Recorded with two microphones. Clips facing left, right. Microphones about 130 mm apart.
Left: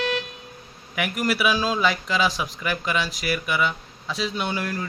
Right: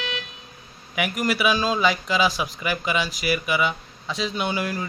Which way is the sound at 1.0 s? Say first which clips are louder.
Even; centre (ahead or behind).